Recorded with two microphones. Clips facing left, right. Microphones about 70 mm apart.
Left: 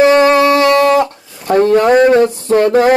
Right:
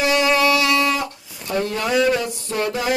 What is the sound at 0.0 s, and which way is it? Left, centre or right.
Music, left.